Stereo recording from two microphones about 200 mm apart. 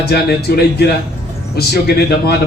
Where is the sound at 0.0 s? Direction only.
50° left (ahead or behind).